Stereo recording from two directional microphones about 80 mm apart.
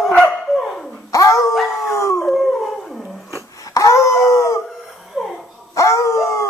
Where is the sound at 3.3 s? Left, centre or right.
Left.